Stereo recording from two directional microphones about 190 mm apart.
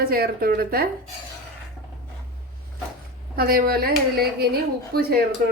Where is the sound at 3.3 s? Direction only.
50° right (ahead or behind).